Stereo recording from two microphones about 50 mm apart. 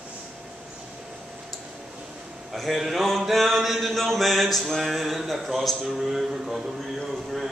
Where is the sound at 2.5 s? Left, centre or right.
Centre.